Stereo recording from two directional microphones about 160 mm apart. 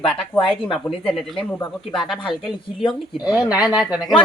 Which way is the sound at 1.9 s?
Centre (ahead or behind).